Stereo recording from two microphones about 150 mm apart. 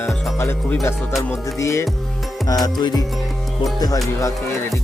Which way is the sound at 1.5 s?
20° left (ahead or behind).